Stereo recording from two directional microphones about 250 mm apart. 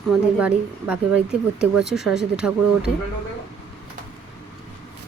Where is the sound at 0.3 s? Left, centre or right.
Centre.